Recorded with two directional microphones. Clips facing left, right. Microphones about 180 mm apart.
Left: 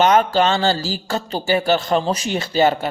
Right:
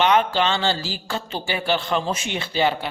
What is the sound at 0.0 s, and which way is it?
A woman's voice, 40° left (ahead or behind).